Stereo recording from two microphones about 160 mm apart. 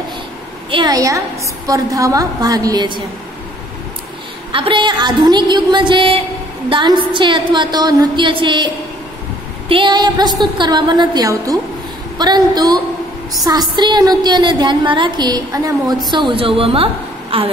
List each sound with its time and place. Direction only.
0.7 s a woman's voice: 30° right (ahead or behind)
4.5 s a woman's voice: 30° right (ahead or behind)